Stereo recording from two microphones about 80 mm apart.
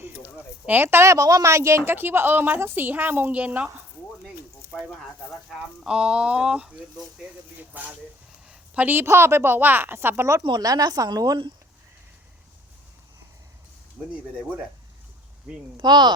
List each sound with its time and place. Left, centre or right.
0.0 s speech: right
4.7 s speech: centre
7.7 s speech: right
10.6 s a woman's voice: right
14.0 s speech: centre
15.5 s speech: centre
15.8 s speech: right